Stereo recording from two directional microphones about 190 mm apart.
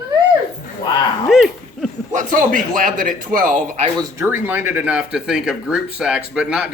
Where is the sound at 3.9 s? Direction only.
15° right (ahead or behind).